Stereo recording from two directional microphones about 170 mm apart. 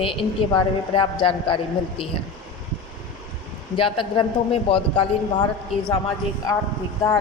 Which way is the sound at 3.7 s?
30° left (ahead or behind).